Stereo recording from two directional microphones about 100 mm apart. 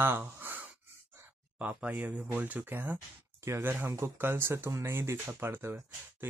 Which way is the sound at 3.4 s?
30° right (ahead or behind).